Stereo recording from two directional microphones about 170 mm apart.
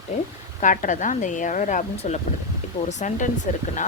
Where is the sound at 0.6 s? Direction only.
50° left (ahead or behind).